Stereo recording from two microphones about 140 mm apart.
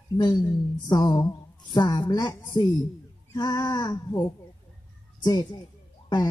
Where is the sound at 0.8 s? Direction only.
30° left (ahead or behind).